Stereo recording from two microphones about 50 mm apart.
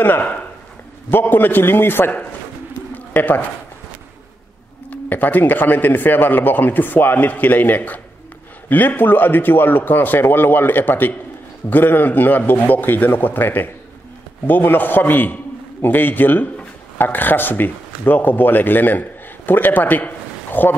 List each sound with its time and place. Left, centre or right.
0.0 s a man's voice: left
2.9 s a sound: left
4.8 s speech: left